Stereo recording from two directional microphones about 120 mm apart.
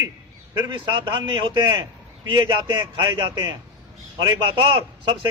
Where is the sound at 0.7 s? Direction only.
40° right (ahead or behind).